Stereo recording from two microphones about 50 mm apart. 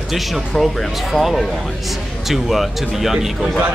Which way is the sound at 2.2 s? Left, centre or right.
Centre.